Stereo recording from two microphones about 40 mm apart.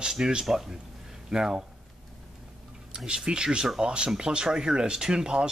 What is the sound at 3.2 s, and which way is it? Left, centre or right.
Speech, centre.